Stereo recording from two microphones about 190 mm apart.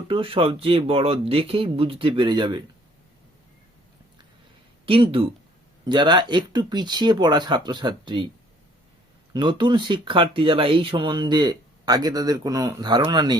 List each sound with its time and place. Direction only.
0.1 s speech: 30° right (ahead or behind)
4.9 s speech: 30° right (ahead or behind)
9.3 s speech: 25° right (ahead or behind)